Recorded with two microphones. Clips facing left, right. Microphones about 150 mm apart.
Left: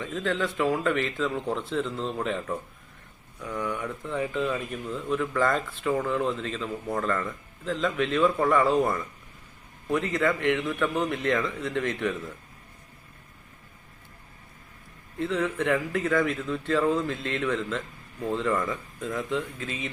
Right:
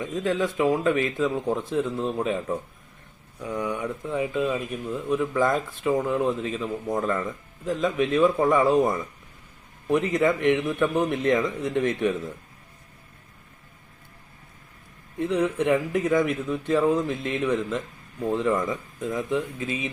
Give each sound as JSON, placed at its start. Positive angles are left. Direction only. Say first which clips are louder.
{"t": 0.0, "sound": "a man's voice", "louder": "right 3 dB", "side_deg": -15}
{"t": 15.2, "sound": "speech", "louder": "right 3 dB", "side_deg": -15}